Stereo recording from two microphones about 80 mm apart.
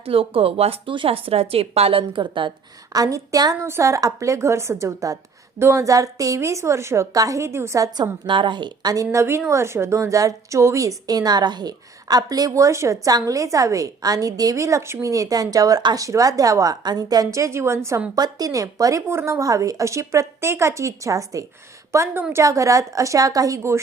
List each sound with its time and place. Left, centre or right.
0.4 s a woman's voice: right
2.9 s a woman's voice: right
3.6 s speech: right
7.1 s speech: right
8.3 s a woman's voice: right
9.1 s a woman's voice: right
16.0 s a woman's voice: right
17.3 s speech: right
18.1 s a woman's voice: right